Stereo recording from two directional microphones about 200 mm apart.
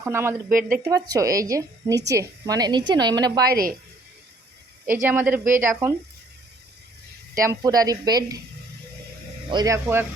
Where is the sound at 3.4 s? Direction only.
45° right (ahead or behind).